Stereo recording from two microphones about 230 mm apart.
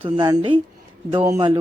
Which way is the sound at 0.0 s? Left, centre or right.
Centre.